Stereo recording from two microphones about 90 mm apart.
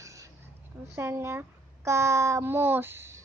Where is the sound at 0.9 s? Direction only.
25° right (ahead or behind).